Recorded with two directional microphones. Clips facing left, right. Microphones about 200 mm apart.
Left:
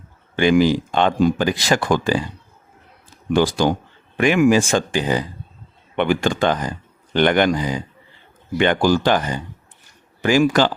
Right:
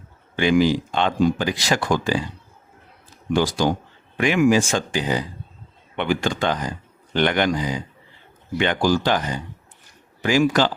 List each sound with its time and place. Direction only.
0.3 s speech: 50° left (ahead or behind)
3.3 s speech: 55° left (ahead or behind)